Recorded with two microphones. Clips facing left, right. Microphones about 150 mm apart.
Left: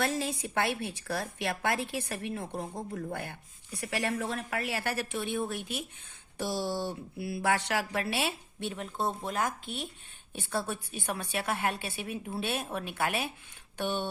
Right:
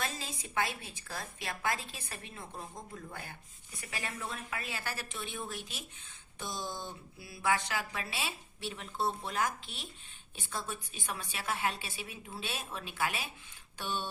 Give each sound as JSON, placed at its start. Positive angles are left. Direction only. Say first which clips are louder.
{"t": 0.0, "sound": "a woman's voice", "louder": "left 9 dB", "side_deg": 65}
{"t": 10.3, "sound": "speech", "louder": "left 7 dB", "side_deg": 65}